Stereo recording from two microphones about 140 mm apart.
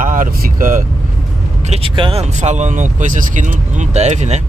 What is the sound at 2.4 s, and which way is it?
Speech, 55° right (ahead or behind).